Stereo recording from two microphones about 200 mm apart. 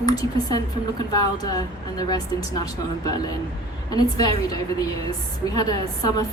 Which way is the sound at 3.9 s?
20° left (ahead or behind).